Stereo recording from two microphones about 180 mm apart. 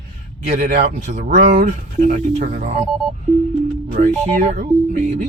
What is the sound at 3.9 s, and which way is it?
Speech, 45° right (ahead or behind).